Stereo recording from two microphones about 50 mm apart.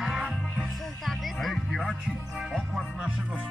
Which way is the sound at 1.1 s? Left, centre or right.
Centre.